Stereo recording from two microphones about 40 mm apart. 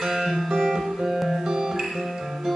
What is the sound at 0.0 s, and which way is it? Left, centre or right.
Music, centre.